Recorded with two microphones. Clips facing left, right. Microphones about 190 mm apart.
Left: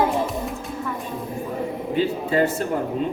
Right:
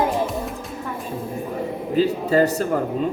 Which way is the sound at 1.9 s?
40° right (ahead or behind).